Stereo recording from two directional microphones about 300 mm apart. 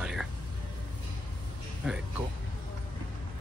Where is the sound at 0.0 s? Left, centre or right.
Centre.